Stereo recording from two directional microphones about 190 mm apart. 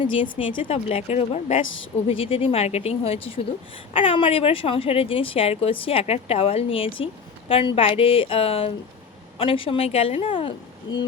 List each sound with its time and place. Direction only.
0.1 s speech: 30° left (ahead or behind)
1.6 s a woman's voice: 90° left
2.0 s speech: 30° left (ahead or behind)